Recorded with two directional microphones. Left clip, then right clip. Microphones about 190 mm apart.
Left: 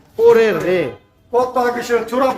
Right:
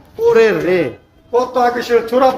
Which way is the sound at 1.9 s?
30° right (ahead or behind).